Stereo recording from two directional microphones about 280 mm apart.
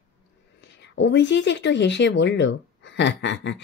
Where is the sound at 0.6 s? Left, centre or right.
Left.